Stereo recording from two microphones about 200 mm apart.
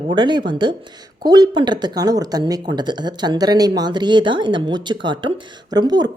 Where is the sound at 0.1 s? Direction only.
20° right (ahead or behind).